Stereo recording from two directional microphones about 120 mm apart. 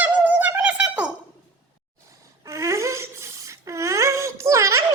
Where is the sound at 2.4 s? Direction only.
25° right (ahead or behind).